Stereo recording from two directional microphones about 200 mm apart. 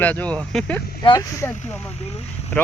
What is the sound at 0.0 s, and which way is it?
Speech, 5° left (ahead or behind).